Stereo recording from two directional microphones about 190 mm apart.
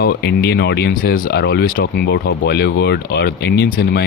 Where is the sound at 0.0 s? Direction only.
60° left (ahead or behind).